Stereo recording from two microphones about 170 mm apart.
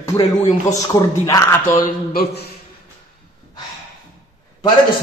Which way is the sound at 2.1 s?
70° left (ahead or behind).